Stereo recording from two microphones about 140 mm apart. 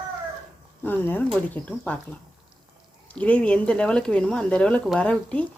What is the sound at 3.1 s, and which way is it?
Speech, 10° left (ahead or behind).